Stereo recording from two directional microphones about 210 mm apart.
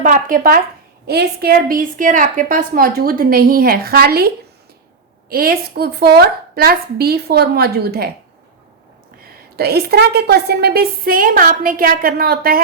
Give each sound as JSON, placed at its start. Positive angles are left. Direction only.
{"t": 0.0, "sound": "a woman's voice", "side_deg": -40}
{"t": 5.3, "sound": "a woman's voice", "side_deg": -45}
{"t": 9.2, "sound": "a woman's voice", "side_deg": -50}